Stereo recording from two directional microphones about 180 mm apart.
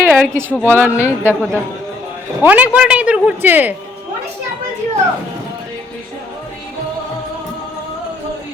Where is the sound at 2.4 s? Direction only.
10° right (ahead or behind).